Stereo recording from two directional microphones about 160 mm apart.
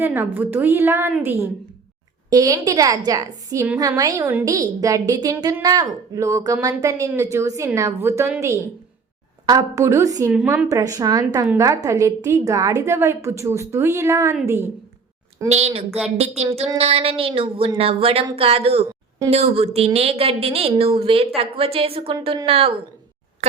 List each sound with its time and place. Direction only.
0.0 s a woman's voice: 15° right (ahead or behind)
10.3 s a woman's voice: 10° right (ahead or behind)
15.4 s a woman's voice: 40° right (ahead or behind)